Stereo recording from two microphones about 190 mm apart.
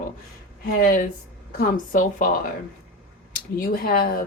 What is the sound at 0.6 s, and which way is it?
Speech, 45° left (ahead or behind).